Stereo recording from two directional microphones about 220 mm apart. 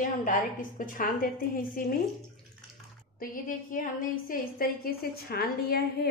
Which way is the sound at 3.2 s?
40° left (ahead or behind).